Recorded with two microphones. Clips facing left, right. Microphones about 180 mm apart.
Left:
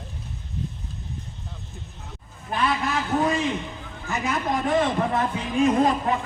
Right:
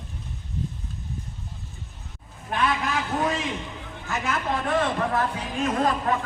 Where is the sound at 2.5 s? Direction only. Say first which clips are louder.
Left 1 dB; 5° left (ahead or behind).